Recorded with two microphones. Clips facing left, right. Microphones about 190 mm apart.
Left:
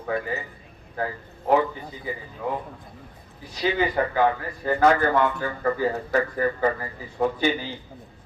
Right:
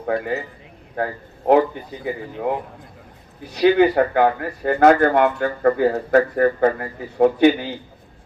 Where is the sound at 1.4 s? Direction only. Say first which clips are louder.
Right 6 dB; 60° right (ahead or behind).